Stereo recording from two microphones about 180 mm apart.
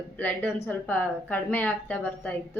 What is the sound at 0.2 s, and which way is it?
Speech, 10° left (ahead or behind).